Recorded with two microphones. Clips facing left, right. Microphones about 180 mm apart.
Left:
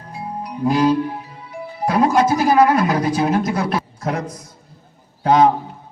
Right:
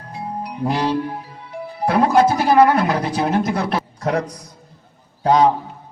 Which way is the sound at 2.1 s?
30° right (ahead or behind).